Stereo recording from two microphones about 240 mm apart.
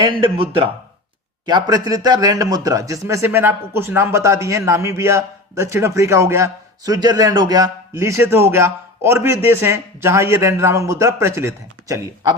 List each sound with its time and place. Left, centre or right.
0.0 s speech: centre
1.5 s speech: centre